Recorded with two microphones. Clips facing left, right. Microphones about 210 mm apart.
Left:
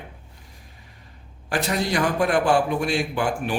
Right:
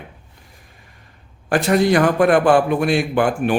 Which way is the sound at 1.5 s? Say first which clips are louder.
Right 9 dB; 55° right (ahead or behind).